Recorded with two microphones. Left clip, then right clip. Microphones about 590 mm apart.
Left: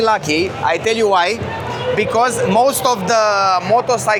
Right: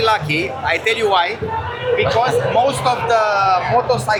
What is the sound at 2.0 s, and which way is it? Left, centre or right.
Speech, left.